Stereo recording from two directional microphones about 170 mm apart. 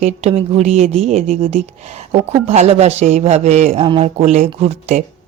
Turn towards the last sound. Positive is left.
turn(degrees=-40)  # may be behind; listen again after turning